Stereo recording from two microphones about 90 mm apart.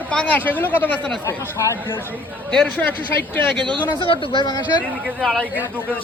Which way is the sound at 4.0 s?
70° left (ahead or behind).